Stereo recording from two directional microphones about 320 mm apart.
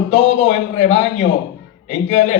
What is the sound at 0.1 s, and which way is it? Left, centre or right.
A man's voice, left.